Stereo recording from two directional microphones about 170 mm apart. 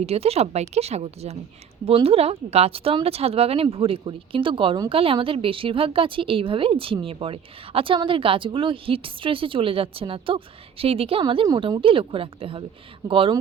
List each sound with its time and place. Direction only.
0.0 s speech: 35° right (ahead or behind)